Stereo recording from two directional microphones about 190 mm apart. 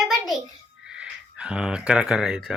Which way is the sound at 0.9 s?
5° right (ahead or behind).